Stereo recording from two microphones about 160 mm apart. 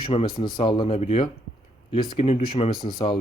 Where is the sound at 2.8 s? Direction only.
25° left (ahead or behind).